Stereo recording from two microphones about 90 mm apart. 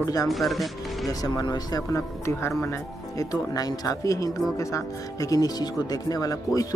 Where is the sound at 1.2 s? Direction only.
45° left (ahead or behind).